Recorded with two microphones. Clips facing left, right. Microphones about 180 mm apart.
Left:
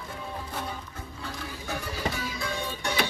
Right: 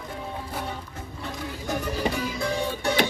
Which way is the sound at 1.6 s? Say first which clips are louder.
Right 7 dB; 40° right (ahead or behind).